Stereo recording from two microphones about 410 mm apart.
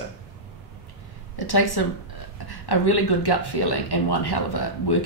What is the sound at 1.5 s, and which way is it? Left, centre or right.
Speech, left.